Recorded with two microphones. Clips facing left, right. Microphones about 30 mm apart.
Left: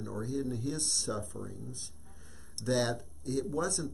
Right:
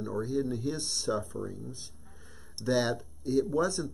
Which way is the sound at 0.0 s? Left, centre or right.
Centre.